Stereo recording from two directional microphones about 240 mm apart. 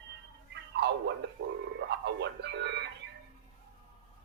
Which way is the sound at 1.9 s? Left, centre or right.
Right.